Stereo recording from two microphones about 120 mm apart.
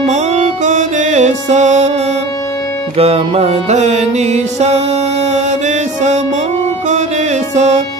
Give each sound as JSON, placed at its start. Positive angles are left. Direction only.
{"t": 0.1, "sound": "music", "side_deg": -75}
{"t": 3.0, "sound": "music", "side_deg": -55}
{"t": 7.5, "sound": "music", "side_deg": -70}